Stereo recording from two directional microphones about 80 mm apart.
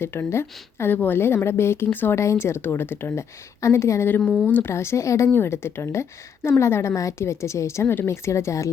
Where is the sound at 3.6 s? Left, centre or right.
Left.